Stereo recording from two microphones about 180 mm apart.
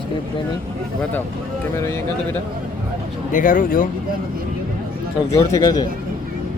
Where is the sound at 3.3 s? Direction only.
45° left (ahead or behind).